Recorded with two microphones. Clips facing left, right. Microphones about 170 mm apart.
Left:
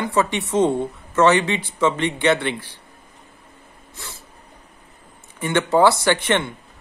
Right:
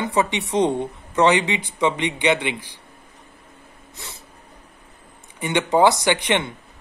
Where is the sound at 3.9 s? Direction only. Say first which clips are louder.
Left 1 dB; 20° right (ahead or behind).